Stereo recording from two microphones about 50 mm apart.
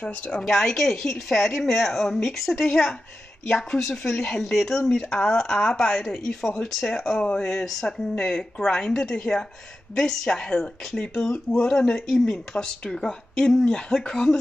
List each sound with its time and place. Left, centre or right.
0.0 s a woman's voice: left
0.4 s speech: centre